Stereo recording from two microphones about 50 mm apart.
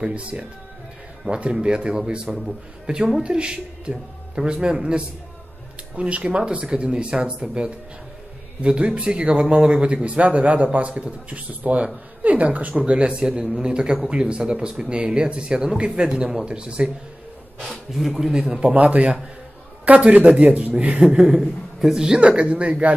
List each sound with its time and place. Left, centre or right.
0.0 s speech: right
17.6 s a man's voice: centre
18.3 s speech: centre
21.0 s speech: centre; by 22.9 s right